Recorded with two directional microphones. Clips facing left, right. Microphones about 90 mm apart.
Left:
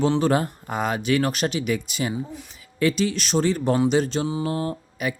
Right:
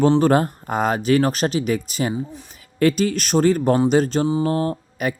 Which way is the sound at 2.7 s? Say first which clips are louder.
Right 4 dB; 45° right (ahead or behind).